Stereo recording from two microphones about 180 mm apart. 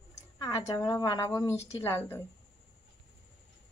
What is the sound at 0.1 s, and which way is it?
Speech, 20° left (ahead or behind).